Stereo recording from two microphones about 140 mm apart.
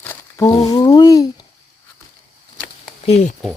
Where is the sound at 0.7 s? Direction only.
25° left (ahead or behind).